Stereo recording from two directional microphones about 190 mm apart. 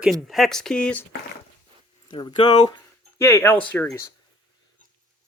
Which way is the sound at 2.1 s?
25° left (ahead or behind).